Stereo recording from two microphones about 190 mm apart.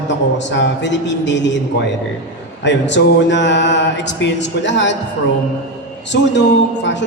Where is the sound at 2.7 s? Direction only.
70° left (ahead or behind).